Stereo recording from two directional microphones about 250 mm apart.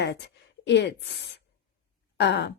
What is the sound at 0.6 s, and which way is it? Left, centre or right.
A woman's voice, left.